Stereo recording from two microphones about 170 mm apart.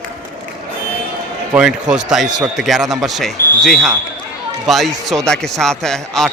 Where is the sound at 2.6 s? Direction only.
Centre (ahead or behind).